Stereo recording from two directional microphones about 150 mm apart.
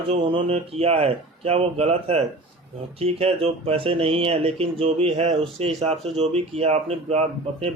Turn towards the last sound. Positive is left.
turn(degrees=-45)  # may be behind; listen again after turning